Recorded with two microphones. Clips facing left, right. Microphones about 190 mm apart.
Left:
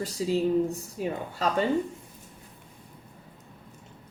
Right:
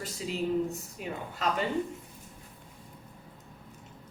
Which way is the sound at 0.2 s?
35° left (ahead or behind).